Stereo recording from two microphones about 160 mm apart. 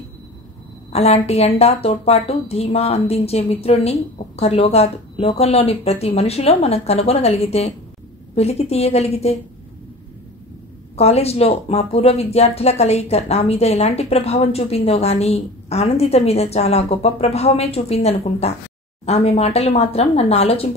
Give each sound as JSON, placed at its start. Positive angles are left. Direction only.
{"t": 0.9, "sound": "speech", "side_deg": 40}
{"t": 11.0, "sound": "speech", "side_deg": 40}